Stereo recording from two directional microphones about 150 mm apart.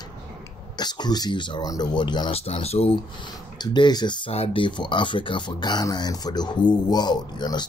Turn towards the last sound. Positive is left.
turn(degrees=30)  # may be behind; listen again after turning